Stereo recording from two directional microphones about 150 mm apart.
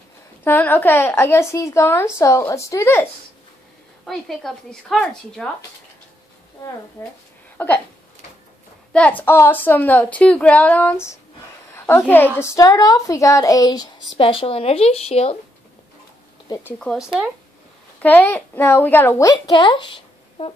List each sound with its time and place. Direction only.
0.4 s a woman's voice: 15° left (ahead or behind)
4.0 s speech: centre (ahead or behind)
7.5 s speech: 15° left (ahead or behind)
8.9 s a woman's voice: 10° left (ahead or behind)
11.7 s a sound: 15° left (ahead or behind)
12.4 s speech: 20° left (ahead or behind)
14.1 s a woman's voice: 35° left (ahead or behind)
16.6 s a woman's voice: 5° left (ahead or behind)
18.0 s a woman's voice: 15° left (ahead or behind)
19.3 s speech: 35° left (ahead or behind)